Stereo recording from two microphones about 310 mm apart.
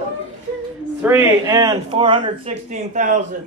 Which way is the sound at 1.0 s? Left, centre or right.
Centre.